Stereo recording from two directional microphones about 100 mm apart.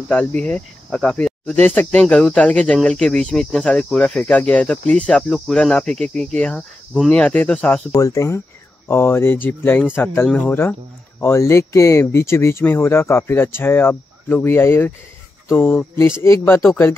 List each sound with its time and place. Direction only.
0.1 s speech: 10° left (ahead or behind)
7.9 s speech: 35° left (ahead or behind)